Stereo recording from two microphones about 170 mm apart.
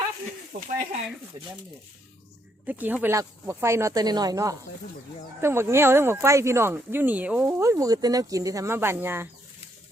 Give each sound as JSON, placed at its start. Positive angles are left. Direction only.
{"t": 0.5, "sound": "speech", "side_deg": -35}
{"t": 2.6, "sound": "speech", "side_deg": -10}